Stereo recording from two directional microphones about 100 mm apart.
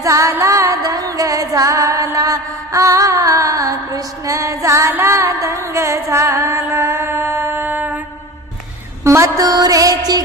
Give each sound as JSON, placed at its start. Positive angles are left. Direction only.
{"t": 0.0, "sound": "music", "side_deg": -30}
{"t": 9.0, "sound": "mantra", "side_deg": -30}